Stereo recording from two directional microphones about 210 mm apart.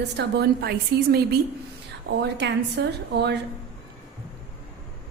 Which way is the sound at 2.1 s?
55° right (ahead or behind).